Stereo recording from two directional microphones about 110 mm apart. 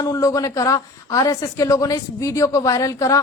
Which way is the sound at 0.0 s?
30° left (ahead or behind).